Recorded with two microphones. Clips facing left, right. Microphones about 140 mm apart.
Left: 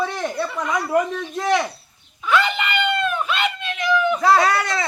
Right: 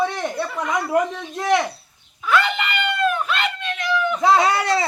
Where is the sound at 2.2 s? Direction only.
Centre (ahead or behind).